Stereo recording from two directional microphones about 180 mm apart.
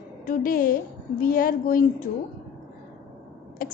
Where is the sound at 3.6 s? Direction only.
50° left (ahead or behind).